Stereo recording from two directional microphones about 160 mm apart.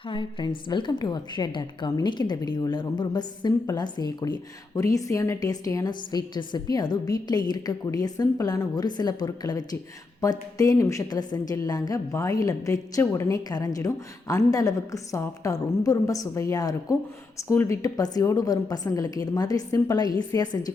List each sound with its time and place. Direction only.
0.1 s a woman's voice: 30° left (ahead or behind)